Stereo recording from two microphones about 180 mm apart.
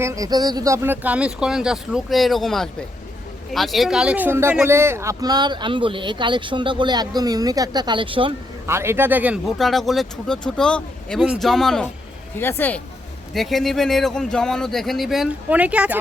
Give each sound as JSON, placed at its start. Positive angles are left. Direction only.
{"t": 0.0, "sound": "speech", "side_deg": -20}
{"t": 8.6, "sound": "speech", "side_deg": -15}